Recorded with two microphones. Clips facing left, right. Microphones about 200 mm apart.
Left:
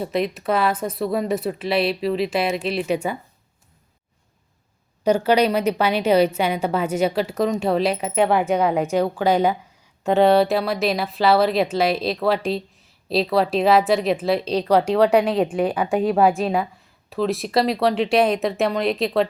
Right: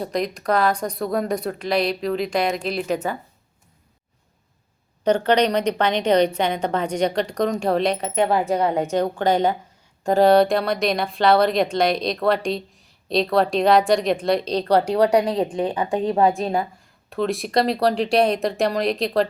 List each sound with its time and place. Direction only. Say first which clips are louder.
0.0 s speech: left 1 dB; 5° left (ahead or behind)
5.0 s a woman's voice: left 1 dB; 10° left (ahead or behind)